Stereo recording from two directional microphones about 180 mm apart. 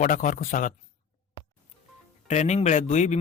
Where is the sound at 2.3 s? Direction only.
40° left (ahead or behind).